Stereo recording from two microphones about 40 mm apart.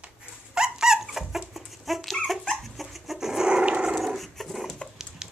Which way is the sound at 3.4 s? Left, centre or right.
Right.